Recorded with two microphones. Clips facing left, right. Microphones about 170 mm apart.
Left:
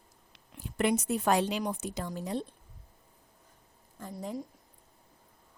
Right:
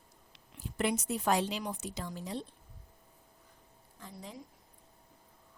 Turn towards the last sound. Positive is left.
turn(degrees=50)  # may be behind; listen again after turning